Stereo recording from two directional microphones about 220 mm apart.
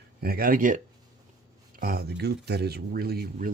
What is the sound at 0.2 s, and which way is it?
Speech, 45° right (ahead or behind).